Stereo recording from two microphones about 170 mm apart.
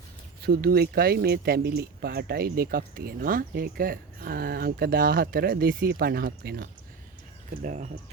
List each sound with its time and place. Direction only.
0.4 s speech: 65° right (ahead or behind)
7.6 s speech: 45° right (ahead or behind)